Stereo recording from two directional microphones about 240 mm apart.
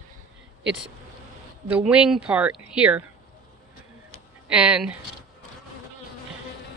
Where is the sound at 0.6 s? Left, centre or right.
Centre.